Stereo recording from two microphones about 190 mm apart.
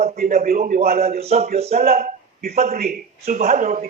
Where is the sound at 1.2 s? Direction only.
35° right (ahead or behind).